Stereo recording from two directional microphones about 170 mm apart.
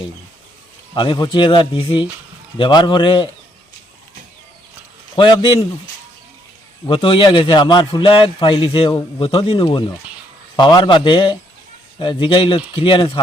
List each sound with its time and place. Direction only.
0.9 s a man's voice: 25° left (ahead or behind)
5.1 s a man's voice: 30° left (ahead or behind)
6.8 s a man's voice: 30° left (ahead or behind)